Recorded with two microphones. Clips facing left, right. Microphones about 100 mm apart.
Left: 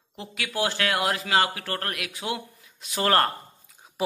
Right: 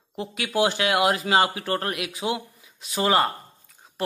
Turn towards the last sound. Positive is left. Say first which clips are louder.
# left 2 dB
turn(degrees=5)  # may be behind; listen again after turning